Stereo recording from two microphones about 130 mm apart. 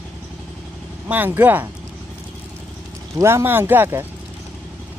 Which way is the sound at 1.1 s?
15° right (ahead or behind).